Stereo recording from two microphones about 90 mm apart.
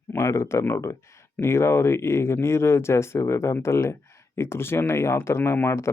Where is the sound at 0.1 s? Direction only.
30° left (ahead or behind).